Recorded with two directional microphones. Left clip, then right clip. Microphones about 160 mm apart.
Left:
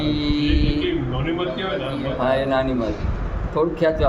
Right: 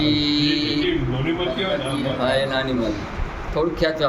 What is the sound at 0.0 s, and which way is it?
Music, 65° left (ahead or behind).